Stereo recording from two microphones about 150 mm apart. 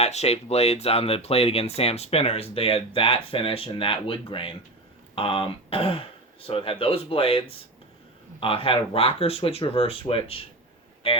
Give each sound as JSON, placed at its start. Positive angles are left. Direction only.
{"t": 0.0, "sound": "speech", "side_deg": 45}